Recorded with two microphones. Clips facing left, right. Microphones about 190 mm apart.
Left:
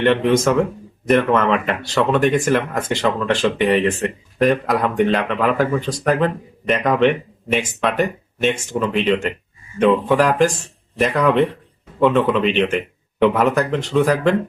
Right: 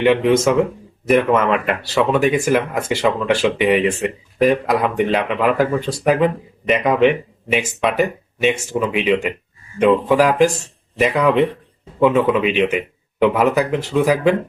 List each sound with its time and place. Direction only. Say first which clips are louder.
0.0 s speech: right 1 dB; 5° right (ahead or behind)